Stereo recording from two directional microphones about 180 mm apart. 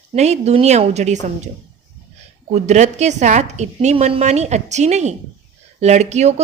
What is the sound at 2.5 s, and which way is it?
A woman's voice, 40° right (ahead or behind).